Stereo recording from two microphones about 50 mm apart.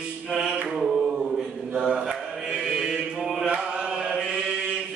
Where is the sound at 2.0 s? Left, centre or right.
Centre.